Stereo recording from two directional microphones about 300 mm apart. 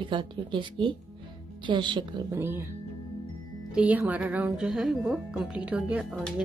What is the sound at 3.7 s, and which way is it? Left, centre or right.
A woman's voice, centre.